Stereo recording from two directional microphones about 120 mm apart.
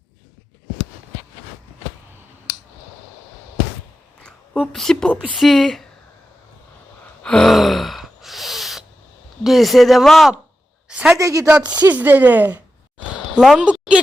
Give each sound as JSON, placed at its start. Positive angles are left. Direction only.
{"t": 4.5, "sound": "speech", "side_deg": 0}
{"t": 7.2, "sound": "gasp", "side_deg": 5}
{"t": 9.4, "sound": "speech", "side_deg": 0}
{"t": 10.8, "sound": "a sound", "side_deg": -5}
{"t": 11.1, "sound": "a woman's voice", "side_deg": -25}
{"t": 11.8, "sound": "a woman's voice", "side_deg": -15}